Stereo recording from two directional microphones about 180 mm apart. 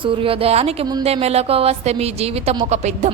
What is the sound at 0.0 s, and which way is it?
A woman's voice, 30° right (ahead or behind).